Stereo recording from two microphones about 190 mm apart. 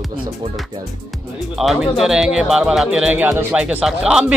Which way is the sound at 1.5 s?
Centre (ahead or behind).